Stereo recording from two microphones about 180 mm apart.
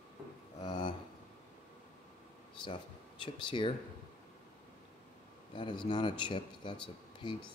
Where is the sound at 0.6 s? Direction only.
25° left (ahead or behind).